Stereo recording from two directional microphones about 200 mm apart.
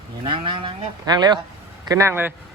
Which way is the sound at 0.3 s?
25° right (ahead or behind).